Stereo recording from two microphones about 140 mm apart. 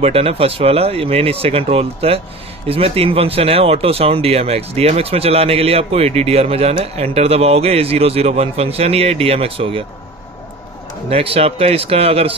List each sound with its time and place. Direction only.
0.0 s speech: 45° right (ahead or behind)
11.1 s speech: 45° right (ahead or behind)